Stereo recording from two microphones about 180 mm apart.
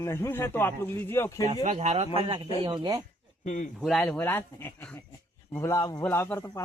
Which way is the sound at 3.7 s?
Centre (ahead or behind).